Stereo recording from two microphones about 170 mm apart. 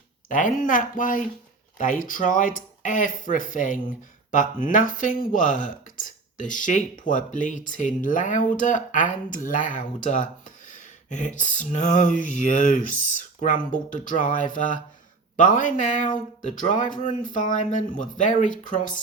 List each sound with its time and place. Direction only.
0.3 s speech: 50° left (ahead or behind)